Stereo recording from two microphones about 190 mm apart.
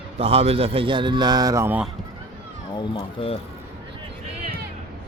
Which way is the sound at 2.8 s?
25° left (ahead or behind).